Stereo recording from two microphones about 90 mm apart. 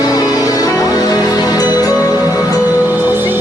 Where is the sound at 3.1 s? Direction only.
25° right (ahead or behind).